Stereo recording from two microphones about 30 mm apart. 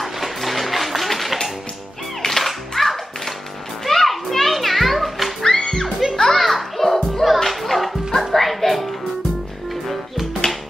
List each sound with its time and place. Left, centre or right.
0.0 s a sound: centre
2.2 s music: centre
3.8 s children playing: centre
5.4 s music: centre
6.1 s children playing: centre
6.4 s music: centre